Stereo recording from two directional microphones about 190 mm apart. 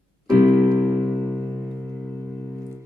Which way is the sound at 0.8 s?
Centre (ahead or behind).